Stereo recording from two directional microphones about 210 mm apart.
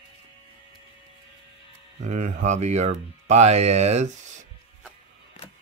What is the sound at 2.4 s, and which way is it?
Speech, 35° right (ahead or behind).